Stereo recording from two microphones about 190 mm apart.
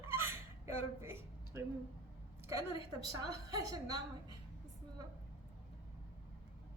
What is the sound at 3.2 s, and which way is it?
Speech, 20° right (ahead or behind).